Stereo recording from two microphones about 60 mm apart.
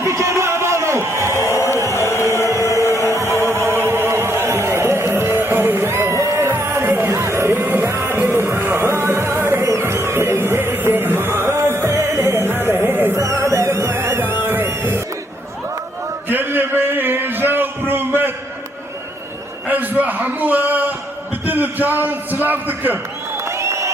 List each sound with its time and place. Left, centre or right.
0.0 s a sound: right
1.5 s chant: left
2.3 s a sound: left
2.8 s music: left
3.2 s music: right
6.5 s music: right
7.1 s music: right
7.6 s music: right
7.9 s music: right
13.1 s music: right
14.2 s music: right
16.3 s a sound: right
19.6 s a sound: right
23.5 s crowd: right